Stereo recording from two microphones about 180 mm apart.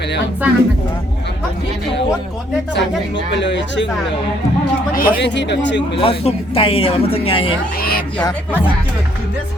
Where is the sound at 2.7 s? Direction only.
80° left.